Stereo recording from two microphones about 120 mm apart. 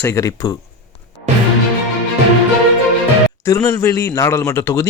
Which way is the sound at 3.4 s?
30° left (ahead or behind).